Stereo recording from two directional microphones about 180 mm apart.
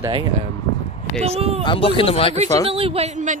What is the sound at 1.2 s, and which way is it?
Speech, 35° right (ahead or behind).